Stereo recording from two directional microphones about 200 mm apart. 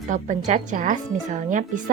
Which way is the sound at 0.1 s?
40° right (ahead or behind).